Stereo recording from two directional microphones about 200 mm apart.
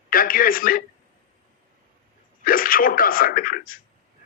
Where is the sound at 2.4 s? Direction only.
45° left (ahead or behind).